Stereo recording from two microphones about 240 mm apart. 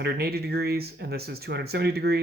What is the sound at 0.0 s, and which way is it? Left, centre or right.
Speech, right.